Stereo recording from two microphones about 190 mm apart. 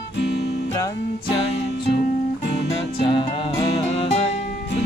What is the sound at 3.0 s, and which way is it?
Music, 30° left (ahead or behind).